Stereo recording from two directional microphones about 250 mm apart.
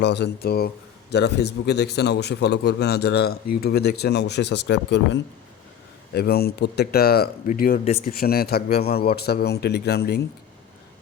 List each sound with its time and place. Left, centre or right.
0.0 s a man's voice: left
6.1 s a man's voice: left